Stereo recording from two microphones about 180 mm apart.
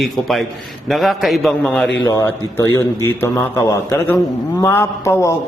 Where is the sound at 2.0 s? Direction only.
15° left (ahead or behind).